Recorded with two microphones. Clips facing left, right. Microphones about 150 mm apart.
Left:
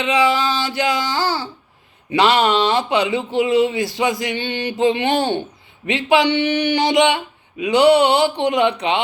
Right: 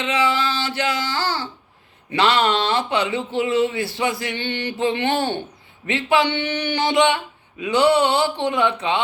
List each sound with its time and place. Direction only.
0.0 s speech: 15° left (ahead or behind)